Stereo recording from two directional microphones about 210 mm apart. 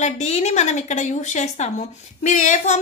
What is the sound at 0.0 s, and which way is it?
A woman's voice, 30° left (ahead or behind).